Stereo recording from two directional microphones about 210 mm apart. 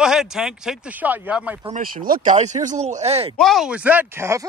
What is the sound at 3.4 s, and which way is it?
Speech, centre (ahead or behind).